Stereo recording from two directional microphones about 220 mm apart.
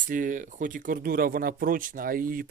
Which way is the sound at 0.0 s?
35° right (ahead or behind).